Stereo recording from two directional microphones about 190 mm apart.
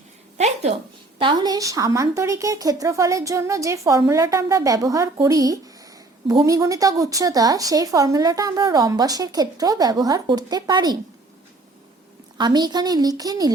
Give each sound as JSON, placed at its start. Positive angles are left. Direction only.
{"t": 0.3, "sound": "a sound", "side_deg": -35}
{"t": 1.2, "sound": "a woman's voice", "side_deg": -25}
{"t": 12.4, "sound": "a woman's voice", "side_deg": -20}